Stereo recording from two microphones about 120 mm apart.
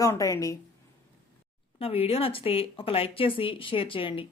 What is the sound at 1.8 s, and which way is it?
A woman's voice, 55° left (ahead or behind).